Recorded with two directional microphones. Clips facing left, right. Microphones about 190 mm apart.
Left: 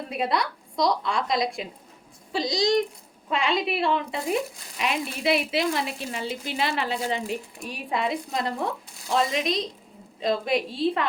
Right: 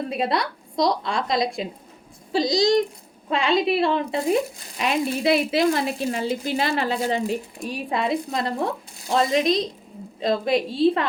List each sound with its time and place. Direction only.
0.2 s speech: 35° right (ahead or behind)